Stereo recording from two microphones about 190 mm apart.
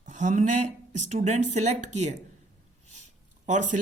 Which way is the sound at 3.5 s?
40° right (ahead or behind).